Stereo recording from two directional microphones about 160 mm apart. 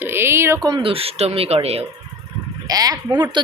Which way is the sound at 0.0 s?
15° right (ahead or behind).